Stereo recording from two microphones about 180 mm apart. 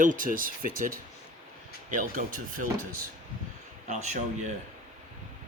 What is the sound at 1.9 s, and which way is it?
Speech, 45° right (ahead or behind).